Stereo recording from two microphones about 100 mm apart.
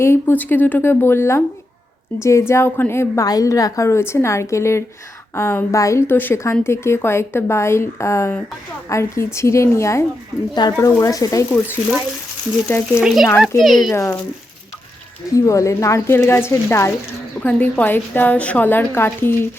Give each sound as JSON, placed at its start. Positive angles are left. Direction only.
{"t": 0.0, "sound": "a woman's voice", "side_deg": 25}
{"t": 3.2, "sound": "a woman's voice", "side_deg": 35}
{"t": 10.5, "sound": "speech", "side_deg": 45}
{"t": 12.6, "sound": "a woman's voice", "side_deg": 25}
{"t": 13.0, "sound": "speech", "side_deg": -5}
{"t": 13.9, "sound": "a woman's voice", "side_deg": 25}
{"t": 15.4, "sound": "a woman's voice", "side_deg": 30}
{"t": 17.4, "sound": "a woman's voice", "side_deg": 15}